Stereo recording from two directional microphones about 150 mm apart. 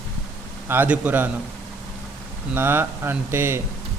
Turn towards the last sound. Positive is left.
turn(degrees=-15)  # may be behind; listen again after turning